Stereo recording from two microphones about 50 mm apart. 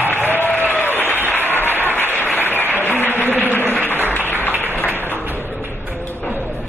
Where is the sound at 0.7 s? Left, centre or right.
Left.